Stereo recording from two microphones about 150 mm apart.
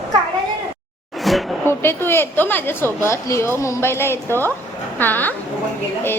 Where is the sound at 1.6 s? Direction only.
15° left (ahead or behind).